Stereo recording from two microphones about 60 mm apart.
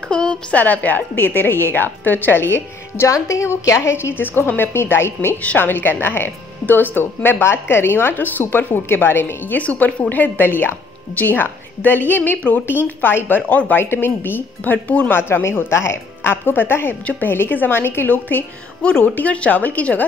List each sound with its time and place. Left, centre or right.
0.1 s a woman's voice: centre
0.6 s a woman's voice: left
3.1 s a woman's voice: left
5.4 s a woman's voice: left
18.8 s a woman's voice: centre